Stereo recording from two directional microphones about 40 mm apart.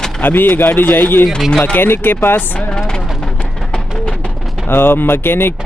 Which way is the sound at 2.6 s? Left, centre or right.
Left.